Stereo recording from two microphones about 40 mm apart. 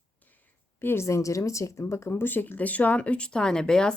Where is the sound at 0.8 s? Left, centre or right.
Left.